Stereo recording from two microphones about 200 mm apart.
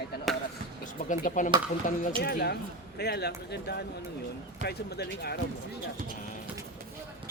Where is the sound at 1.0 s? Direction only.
40° left (ahead or behind).